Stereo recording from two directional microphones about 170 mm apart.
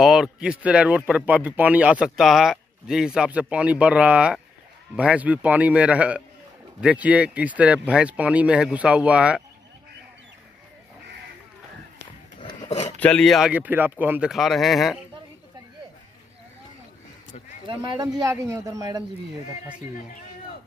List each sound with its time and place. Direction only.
0.0 s speech: 5° right (ahead or behind)
12.4 s a sound: 35° left (ahead or behind)
13.0 s speech: 5° left (ahead or behind)
13.5 s speech: 10° right (ahead or behind)
14.3 s speech: centre (ahead or behind)
17.6 s speech: 25° right (ahead or behind)